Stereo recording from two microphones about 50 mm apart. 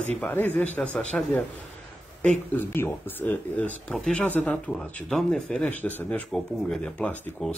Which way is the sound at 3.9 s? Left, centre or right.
Centre.